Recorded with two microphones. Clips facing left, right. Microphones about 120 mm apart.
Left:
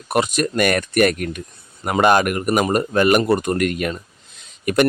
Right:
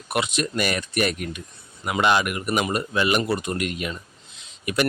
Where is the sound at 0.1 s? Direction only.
45° left (ahead or behind).